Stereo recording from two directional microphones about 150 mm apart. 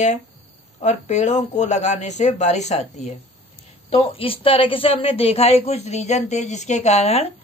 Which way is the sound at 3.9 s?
40° left (ahead or behind).